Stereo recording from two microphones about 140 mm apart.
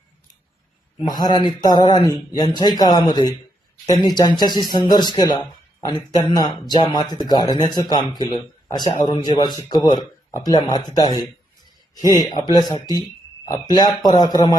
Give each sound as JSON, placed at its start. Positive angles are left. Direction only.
{"t": 0.9, "sound": "speech", "side_deg": 30}